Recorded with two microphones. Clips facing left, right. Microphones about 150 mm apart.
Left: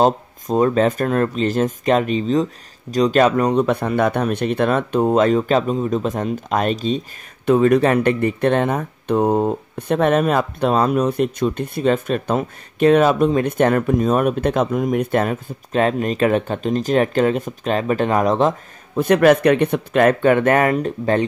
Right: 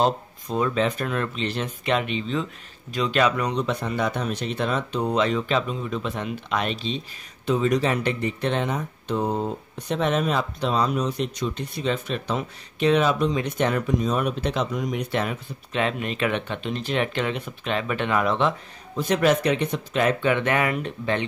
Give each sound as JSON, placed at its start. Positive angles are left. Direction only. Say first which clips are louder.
{"t": 0.0, "sound": "speech", "louder": "left 6 dB", "side_deg": 45}
{"t": 7.4, "sound": "speech", "louder": "left 8 dB", "side_deg": 55}
{"t": 18.9, "sound": "speech", "louder": "left 7 dB", "side_deg": 60}